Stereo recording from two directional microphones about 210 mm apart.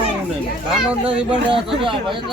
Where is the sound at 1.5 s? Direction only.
25° right (ahead or behind).